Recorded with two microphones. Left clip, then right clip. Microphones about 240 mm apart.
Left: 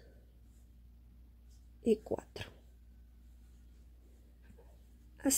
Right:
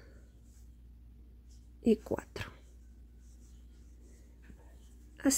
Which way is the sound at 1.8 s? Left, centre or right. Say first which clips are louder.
Right 2 dB; centre.